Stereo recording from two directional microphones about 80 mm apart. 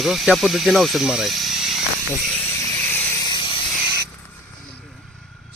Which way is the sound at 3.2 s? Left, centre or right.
Left.